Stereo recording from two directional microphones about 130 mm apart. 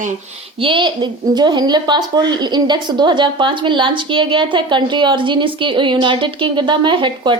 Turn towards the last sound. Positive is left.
turn(degrees=-40)  # may be behind; listen again after turning